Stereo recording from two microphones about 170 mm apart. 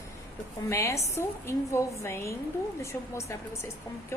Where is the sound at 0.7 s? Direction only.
15° left (ahead or behind).